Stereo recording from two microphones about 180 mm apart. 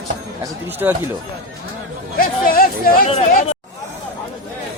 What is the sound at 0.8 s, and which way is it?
Speech, 15° right (ahead or behind).